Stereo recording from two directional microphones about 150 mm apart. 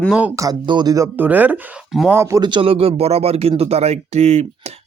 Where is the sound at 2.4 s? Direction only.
30° right (ahead or behind).